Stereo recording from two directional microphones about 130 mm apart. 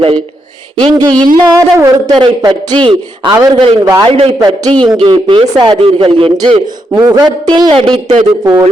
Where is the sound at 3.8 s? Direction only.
30° right (ahead or behind).